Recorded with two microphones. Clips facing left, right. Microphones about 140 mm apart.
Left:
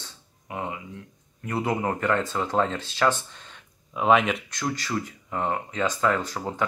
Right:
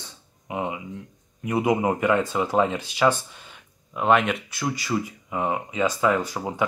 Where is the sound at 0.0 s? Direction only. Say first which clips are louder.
Right 2 dB; 15° right (ahead or behind).